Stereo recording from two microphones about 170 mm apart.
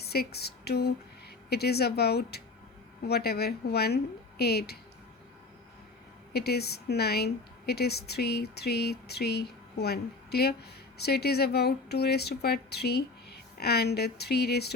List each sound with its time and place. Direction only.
0.0 s a sound: 70° left (ahead or behind)
1.5 s speech: 70° left (ahead or behind)
6.3 s speech: 70° left (ahead or behind)